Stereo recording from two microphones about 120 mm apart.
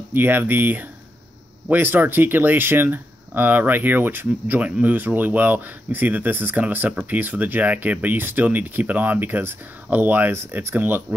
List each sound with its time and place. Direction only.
0.1 s speech: 15° right (ahead or behind)